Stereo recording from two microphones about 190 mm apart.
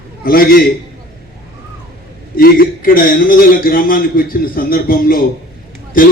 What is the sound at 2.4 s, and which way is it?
A man's voice, 50° left (ahead or behind).